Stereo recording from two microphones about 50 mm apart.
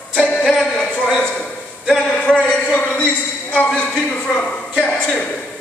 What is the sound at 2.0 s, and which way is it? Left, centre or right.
A man's voice, centre.